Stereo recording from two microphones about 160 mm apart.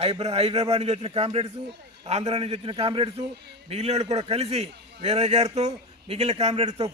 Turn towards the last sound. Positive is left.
turn(degrees=-40)  # may be behind; listen again after turning